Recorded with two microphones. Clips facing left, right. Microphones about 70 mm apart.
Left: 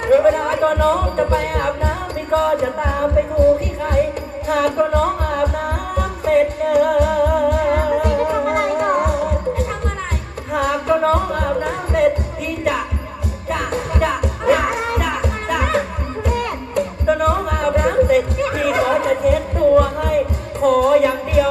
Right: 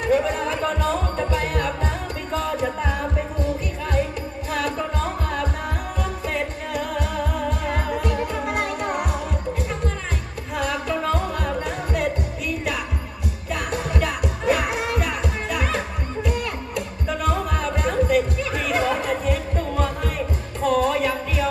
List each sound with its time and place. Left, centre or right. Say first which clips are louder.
0.0 s music: left 7 dB; left
10.5 s music: left 8 dB; left
13.5 s music: left 4 dB; left